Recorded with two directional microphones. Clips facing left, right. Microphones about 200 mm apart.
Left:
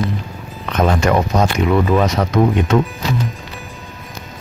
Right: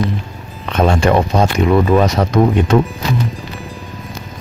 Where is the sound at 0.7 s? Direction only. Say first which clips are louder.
Right 2 dB; 30° right (ahead or behind).